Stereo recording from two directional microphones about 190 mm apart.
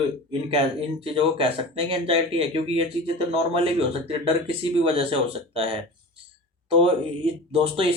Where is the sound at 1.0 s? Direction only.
30° right (ahead or behind).